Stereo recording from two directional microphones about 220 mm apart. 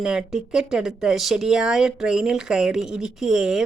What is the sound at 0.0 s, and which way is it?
Speech, centre (ahead or behind).